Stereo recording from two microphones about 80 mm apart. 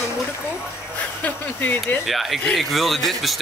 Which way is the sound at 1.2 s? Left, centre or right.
Left.